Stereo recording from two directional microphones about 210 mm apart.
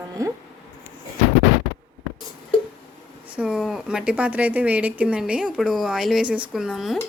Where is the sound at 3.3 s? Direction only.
5° right (ahead or behind).